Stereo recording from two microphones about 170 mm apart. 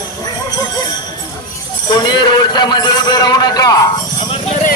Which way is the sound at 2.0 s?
25° left (ahead or behind).